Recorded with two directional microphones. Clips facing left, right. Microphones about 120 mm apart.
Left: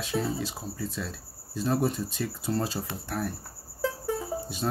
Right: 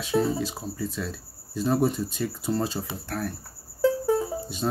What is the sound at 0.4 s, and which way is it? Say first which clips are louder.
Speech: right 4 dB; centre (ahead or behind).